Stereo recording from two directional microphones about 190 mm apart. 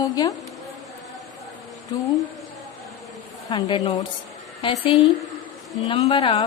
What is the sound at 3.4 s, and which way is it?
A woman's voice, 20° left (ahead or behind).